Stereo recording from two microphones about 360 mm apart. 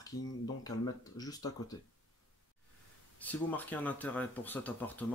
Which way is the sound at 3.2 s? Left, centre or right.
Centre.